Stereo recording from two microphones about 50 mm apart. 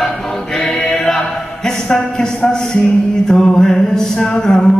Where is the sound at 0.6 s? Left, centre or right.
Centre.